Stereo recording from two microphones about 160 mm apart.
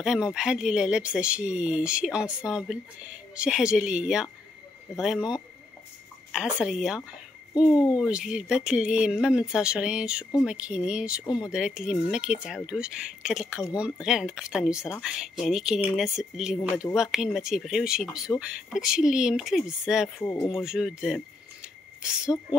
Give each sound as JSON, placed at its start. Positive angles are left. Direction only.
{"t": 0.0, "sound": "speech", "side_deg": -5}
{"t": 7.7, "sound": "speech", "side_deg": 25}
{"t": 8.0, "sound": "speech", "side_deg": -5}
{"t": 11.2, "sound": "speech", "side_deg": 25}
{"t": 11.5, "sound": "speech", "side_deg": -5}
{"t": 20.5, "sound": "a sound", "side_deg": 0}